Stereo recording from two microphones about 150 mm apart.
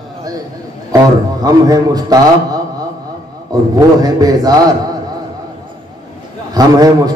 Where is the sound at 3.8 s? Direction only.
25° right (ahead or behind).